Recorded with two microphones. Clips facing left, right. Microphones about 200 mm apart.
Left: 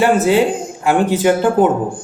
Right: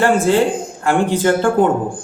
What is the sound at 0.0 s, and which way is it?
A woman's voice, 15° left (ahead or behind).